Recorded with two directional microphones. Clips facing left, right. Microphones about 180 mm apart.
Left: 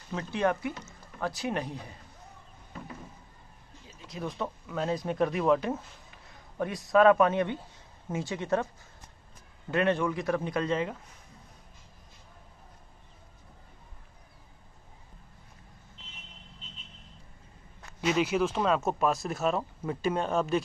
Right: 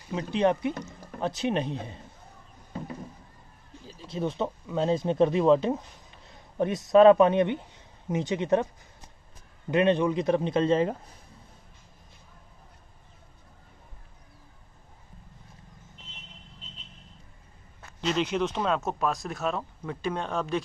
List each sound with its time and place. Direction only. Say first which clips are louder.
0.1 s speech: right 4 dB; 15° right (ahead or behind)
3.8 s speech: right 6 dB; 25° right (ahead or behind)
9.7 s speech: right 4 dB; 20° right (ahead or behind); by 11.1 s 35° right (ahead or behind)
18.0 s speech: left 1 dB; 5° left (ahead or behind)